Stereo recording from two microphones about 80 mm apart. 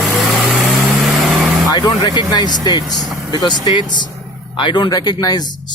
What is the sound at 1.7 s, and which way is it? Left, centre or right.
Speech, left.